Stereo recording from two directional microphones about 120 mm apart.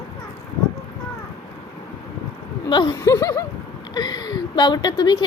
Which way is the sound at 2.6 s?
35° left (ahead or behind).